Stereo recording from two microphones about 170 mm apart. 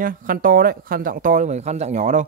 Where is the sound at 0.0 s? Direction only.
55° right (ahead or behind).